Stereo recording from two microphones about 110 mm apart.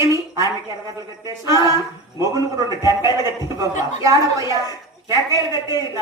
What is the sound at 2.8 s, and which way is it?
Speech, 35° left (ahead or behind).